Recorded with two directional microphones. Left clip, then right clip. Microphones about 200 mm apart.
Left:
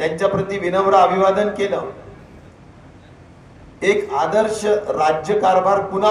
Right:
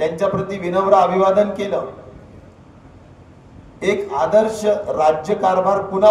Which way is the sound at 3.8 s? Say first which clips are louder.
Left 1 dB; 45° right (ahead or behind).